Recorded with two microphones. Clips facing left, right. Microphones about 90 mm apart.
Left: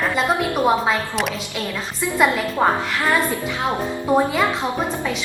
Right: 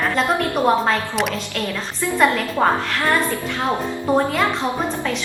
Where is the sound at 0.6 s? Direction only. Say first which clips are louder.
Right 2 dB; 5° left (ahead or behind).